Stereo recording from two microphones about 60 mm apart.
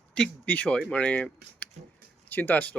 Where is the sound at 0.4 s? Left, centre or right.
Left.